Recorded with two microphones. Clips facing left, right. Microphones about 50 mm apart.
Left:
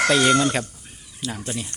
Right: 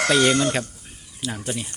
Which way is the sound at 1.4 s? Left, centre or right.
Centre.